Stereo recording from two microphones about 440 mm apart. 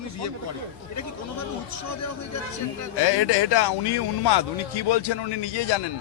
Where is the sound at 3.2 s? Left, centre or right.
Left.